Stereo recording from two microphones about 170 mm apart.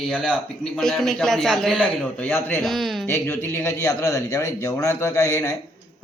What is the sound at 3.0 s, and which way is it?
A man's voice, 15° left (ahead or behind).